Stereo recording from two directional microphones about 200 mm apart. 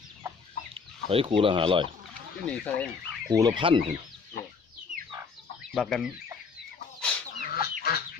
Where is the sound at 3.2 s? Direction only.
20° right (ahead or behind).